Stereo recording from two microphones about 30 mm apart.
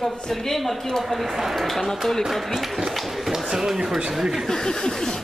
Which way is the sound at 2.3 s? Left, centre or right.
Centre.